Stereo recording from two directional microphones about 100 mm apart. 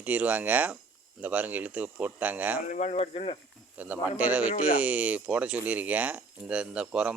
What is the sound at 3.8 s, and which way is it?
Speech, 15° right (ahead or behind).